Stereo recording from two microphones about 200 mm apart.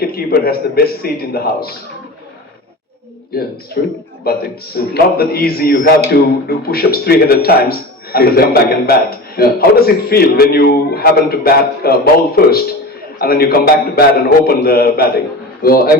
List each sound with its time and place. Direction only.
0.0 s speech: 50° left (ahead or behind)
3.3 s speech: 50° left (ahead or behind)